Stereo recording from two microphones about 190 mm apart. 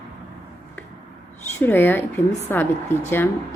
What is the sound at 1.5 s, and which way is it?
A woman's voice, 10° left (ahead or behind).